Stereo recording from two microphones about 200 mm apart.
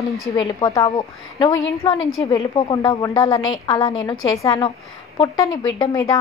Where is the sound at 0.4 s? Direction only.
20° left (ahead or behind).